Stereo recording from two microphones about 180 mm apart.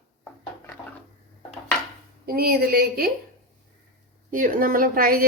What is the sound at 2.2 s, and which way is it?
Speech, 55° right (ahead or behind).